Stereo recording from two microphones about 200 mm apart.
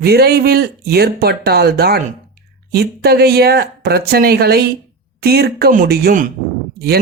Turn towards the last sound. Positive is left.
turn(degrees=-50)  # may be behind; listen again after turning